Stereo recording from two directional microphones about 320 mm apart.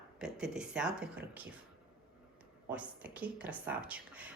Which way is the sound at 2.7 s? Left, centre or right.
Centre.